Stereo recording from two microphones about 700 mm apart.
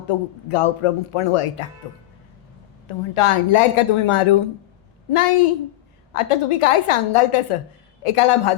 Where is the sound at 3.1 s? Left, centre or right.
Left.